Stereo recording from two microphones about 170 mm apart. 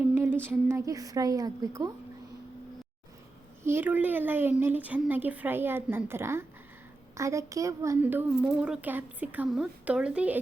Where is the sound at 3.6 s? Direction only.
15° right (ahead or behind).